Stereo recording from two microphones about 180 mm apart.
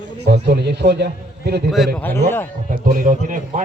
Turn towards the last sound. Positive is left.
turn(degrees=-45)  # may be behind; listen again after turning